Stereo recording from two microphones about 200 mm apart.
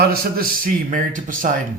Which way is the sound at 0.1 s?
45° right (ahead or behind).